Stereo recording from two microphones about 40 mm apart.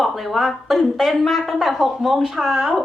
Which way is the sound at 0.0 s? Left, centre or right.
Centre.